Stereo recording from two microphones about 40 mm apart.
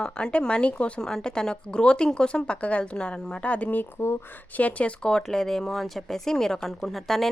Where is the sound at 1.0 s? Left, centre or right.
Centre; by 4.9 s left.